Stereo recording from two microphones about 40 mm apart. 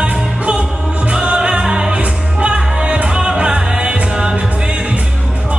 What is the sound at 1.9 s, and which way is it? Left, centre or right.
Music, right.